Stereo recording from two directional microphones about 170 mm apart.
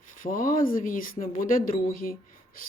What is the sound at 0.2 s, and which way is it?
A woman's voice, 55° left (ahead or behind).